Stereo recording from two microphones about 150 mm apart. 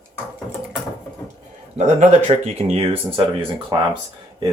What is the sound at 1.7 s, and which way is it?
Speech, 45° right (ahead or behind).